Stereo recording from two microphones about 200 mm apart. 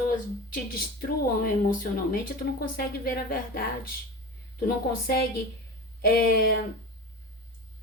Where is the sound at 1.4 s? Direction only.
45° left (ahead or behind).